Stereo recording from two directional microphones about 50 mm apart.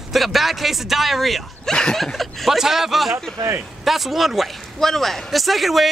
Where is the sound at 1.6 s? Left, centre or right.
Centre.